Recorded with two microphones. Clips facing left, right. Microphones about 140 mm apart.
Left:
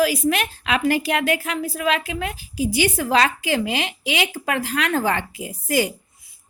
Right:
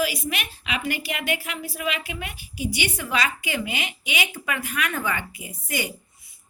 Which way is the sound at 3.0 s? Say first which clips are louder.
Left 7 dB; 85° left.